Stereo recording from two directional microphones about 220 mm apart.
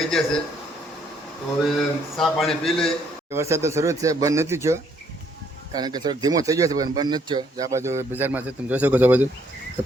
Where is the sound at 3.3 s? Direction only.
10° right (ahead or behind).